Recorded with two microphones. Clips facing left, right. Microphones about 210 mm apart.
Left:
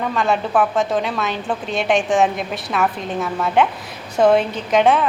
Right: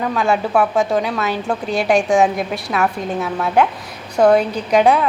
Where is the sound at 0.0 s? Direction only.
Centre (ahead or behind).